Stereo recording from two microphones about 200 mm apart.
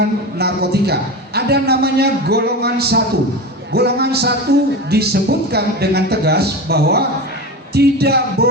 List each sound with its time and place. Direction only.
0.0 s a man's voice: 55° right (ahead or behind)